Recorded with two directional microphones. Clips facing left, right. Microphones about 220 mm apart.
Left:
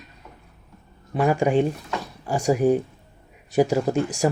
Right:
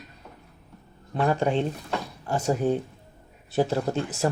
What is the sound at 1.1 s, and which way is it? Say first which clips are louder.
Speech: left 4 dB; 10° left (ahead or behind).